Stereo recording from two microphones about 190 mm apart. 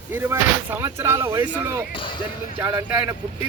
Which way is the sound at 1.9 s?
25° left (ahead or behind).